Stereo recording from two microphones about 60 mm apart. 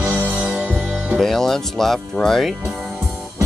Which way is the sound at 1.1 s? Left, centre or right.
Centre.